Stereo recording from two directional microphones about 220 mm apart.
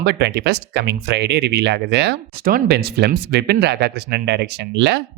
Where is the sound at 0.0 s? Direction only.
50° right (ahead or behind).